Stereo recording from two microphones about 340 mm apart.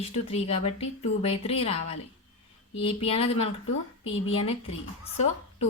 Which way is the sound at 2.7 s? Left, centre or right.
Centre.